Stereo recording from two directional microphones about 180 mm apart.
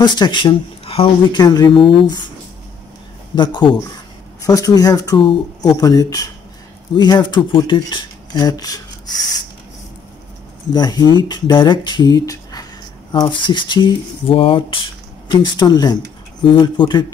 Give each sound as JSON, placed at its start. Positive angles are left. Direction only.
{"t": 0.0, "sound": "speech", "side_deg": 25}
{"t": 3.3, "sound": "speech", "side_deg": 25}
{"t": 10.7, "sound": "speech", "side_deg": 20}